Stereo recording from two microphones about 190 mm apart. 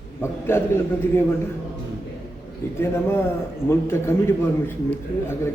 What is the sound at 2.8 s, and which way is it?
A man's voice, 15° left (ahead or behind).